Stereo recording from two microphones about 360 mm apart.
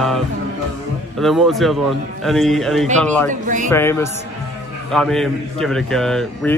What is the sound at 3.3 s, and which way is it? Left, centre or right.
Speech, right.